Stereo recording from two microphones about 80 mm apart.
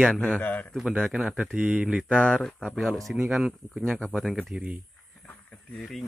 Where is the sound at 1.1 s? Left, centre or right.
Centre.